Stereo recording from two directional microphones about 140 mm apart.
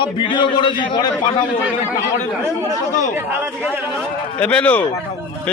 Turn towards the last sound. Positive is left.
turn(degrees=10)  # may be behind; listen again after turning